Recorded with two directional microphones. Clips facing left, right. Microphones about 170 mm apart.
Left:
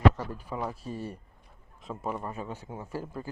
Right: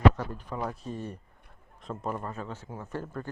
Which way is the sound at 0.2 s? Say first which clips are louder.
Even; 5° left (ahead or behind).